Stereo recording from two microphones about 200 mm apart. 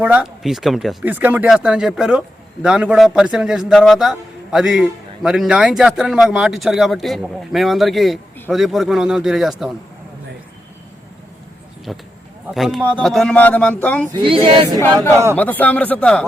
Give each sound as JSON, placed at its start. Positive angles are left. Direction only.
{"t": 0.0, "sound": "speech", "side_deg": -5}
{"t": 11.9, "sound": "speech", "side_deg": 0}
{"t": 14.1, "sound": "speech", "side_deg": -25}
{"t": 15.4, "sound": "speech", "side_deg": 10}